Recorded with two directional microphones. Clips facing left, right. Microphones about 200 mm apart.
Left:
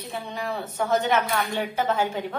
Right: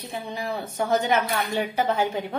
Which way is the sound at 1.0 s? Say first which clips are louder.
Even; 10° right (ahead or behind).